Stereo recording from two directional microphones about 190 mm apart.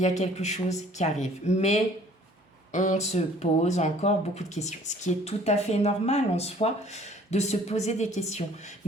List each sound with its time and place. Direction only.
0.0 s speech: 40° left (ahead or behind)